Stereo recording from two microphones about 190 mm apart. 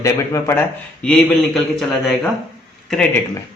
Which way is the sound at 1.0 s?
5° left (ahead or behind).